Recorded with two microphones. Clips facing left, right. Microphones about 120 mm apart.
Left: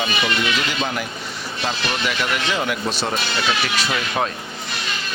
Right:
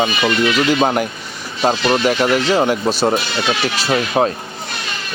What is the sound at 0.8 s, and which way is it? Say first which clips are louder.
Speech: right 9 dB; 50° right (ahead or behind).